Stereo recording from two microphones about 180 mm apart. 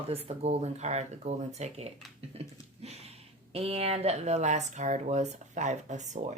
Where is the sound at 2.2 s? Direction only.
35° right (ahead or behind).